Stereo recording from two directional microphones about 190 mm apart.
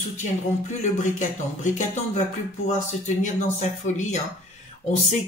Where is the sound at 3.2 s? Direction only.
40° left (ahead or behind).